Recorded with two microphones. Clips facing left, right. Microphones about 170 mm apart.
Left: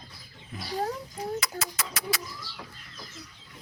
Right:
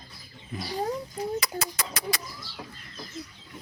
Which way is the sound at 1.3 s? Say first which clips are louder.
Right 2 dB; centre (ahead or behind).